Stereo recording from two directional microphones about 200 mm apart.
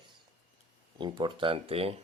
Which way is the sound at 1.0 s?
25° right (ahead or behind).